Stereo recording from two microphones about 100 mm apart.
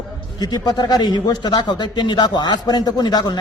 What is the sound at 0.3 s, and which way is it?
A man's voice, 40° left (ahead or behind).